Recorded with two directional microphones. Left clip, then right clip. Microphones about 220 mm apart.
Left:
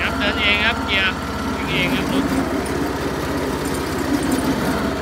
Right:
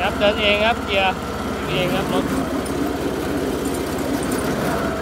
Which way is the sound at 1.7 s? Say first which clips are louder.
Even; 10° right (ahead or behind).